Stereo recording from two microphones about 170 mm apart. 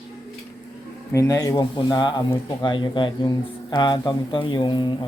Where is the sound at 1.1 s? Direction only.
20° left (ahead or behind).